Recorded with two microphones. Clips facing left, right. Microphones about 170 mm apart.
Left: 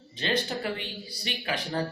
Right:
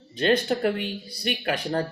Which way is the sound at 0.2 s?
55° right (ahead or behind).